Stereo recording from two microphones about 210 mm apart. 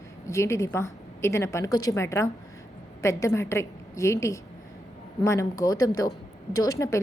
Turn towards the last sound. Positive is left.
turn(degrees=15)  # may be behind; listen again after turning